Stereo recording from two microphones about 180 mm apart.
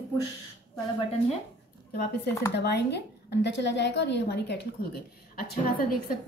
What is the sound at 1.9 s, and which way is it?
A woman's voice, 60° left (ahead or behind).